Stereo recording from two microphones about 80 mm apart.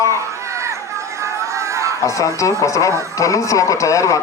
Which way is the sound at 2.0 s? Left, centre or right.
Left.